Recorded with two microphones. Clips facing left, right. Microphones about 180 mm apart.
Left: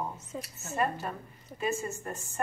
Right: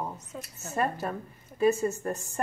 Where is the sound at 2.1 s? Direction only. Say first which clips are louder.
Right 4 dB; 40° right (ahead or behind).